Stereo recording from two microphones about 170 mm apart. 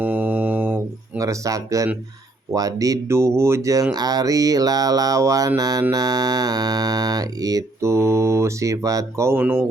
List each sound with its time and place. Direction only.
0.0 s music: 10° right (ahead or behind)
2.5 s speech: 20° right (ahead or behind)